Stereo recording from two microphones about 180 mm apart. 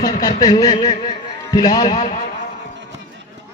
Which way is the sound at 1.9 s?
45° left (ahead or behind).